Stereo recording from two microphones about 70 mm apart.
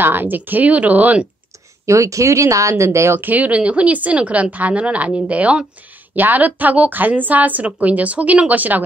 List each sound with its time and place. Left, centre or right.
0.0 s a woman's voice: right
1.9 s speech: right
3.2 s a woman's voice: right